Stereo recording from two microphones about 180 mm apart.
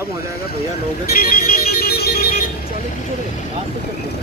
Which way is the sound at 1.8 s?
60° left (ahead or behind).